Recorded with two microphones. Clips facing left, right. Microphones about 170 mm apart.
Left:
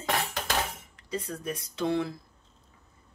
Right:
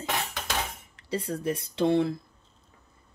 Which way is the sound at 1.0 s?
30° right (ahead or behind).